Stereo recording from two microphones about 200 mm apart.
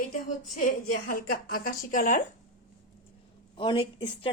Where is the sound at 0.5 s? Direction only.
45° left (ahead or behind).